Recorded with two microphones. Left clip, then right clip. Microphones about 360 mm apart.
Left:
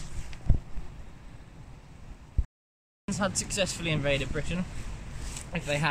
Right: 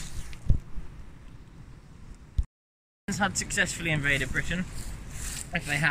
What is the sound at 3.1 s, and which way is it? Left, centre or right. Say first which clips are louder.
Speech: right 2 dB; centre.